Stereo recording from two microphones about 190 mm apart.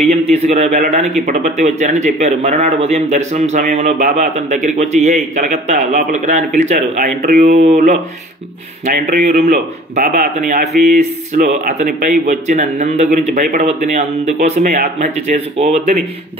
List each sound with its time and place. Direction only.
0.1 s speech: 35° right (ahead or behind)